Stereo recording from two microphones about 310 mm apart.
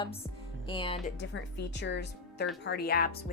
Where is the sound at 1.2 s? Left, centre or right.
Left.